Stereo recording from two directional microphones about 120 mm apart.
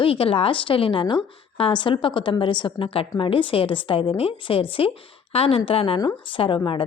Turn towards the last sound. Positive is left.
turn(degrees=45)  # may be behind; listen again after turning